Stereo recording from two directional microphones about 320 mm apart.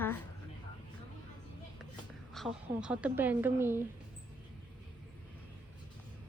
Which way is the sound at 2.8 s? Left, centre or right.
Centre.